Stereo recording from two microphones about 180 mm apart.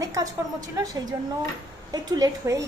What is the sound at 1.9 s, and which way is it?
Speech, 20° right (ahead or behind).